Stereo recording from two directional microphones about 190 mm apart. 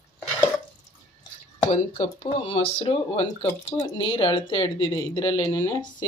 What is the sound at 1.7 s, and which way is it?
A woman's voice, 35° left (ahead or behind).